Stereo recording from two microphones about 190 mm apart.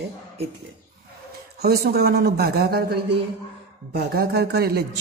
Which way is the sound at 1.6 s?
55° right (ahead or behind).